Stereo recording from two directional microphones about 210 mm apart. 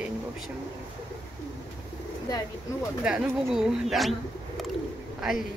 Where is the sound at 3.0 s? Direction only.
5° right (ahead or behind).